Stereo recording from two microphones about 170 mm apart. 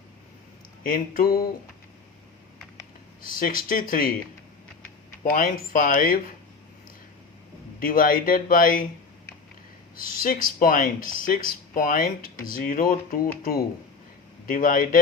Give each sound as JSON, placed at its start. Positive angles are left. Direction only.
{"t": 0.9, "sound": "speech", "side_deg": 55}
{"t": 3.2, "sound": "speech", "side_deg": 55}
{"t": 5.2, "sound": "speech", "side_deg": 55}
{"t": 7.8, "sound": "speech", "side_deg": 55}
{"t": 9.9, "sound": "speech", "side_deg": 55}